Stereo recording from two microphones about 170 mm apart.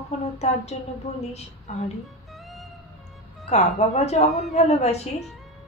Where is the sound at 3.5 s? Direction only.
40° left (ahead or behind).